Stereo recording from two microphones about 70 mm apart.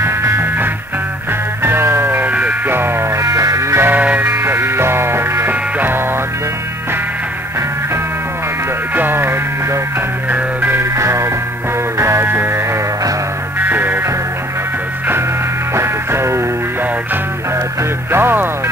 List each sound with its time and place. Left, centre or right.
0.0 s music: right
3.2 s music: right
3.8 s music: right
4.3 s music: right
8.9 s music: right
11.0 s music: right
15.7 s music: right
18.1 s music: right